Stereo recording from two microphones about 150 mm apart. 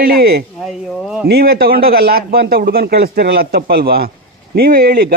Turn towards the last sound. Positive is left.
turn(degrees=-80)